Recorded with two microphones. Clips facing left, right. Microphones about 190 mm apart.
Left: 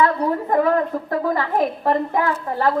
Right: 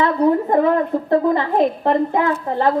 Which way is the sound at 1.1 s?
25° right (ahead or behind).